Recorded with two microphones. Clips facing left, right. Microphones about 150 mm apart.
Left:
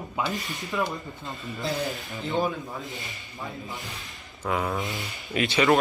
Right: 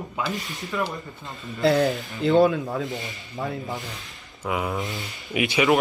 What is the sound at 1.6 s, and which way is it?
Speech, 80° right.